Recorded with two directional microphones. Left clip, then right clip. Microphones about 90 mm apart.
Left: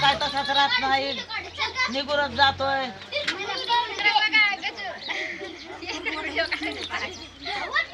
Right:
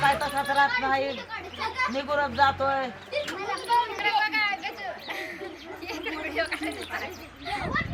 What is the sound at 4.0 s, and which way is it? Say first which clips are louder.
Chatter: left 5 dB; centre (ahead or behind).